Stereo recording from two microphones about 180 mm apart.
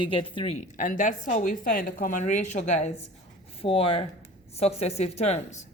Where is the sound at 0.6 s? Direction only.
45° left (ahead or behind).